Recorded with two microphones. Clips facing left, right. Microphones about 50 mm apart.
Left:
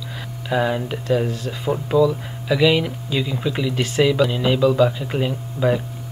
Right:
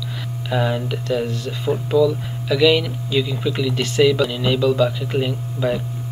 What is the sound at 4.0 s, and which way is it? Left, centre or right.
Speech, centre.